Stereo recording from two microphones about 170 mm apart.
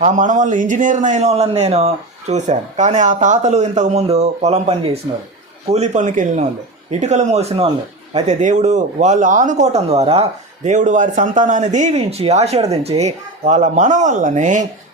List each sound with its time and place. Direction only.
0.0 s a man's voice: 45° right (ahead or behind)